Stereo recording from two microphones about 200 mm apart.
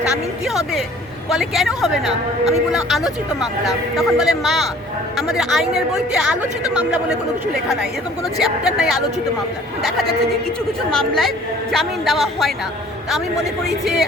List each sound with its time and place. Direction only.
0.4 s a woman's voice: centre (ahead or behind)
2.0 s speech: 30° right (ahead or behind)
2.7 s a woman's voice: centre (ahead or behind)
8.4 s a woman's voice: centre (ahead or behind)
10.9 s a woman's voice: centre (ahead or behind)
13.8 s a woman's voice: centre (ahead or behind)